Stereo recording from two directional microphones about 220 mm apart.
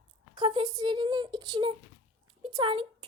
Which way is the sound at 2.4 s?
20° right (ahead or behind).